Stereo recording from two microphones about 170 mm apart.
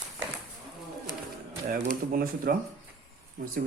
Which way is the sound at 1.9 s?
55° right (ahead or behind).